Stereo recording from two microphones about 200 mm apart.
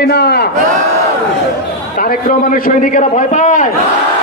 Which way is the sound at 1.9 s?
45° left (ahead or behind).